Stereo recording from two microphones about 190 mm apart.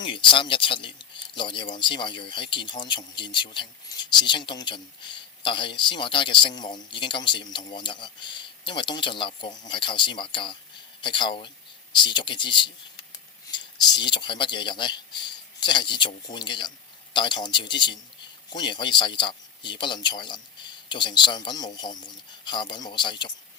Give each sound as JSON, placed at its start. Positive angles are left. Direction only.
{"t": 0.0, "sound": "speech", "side_deg": 25}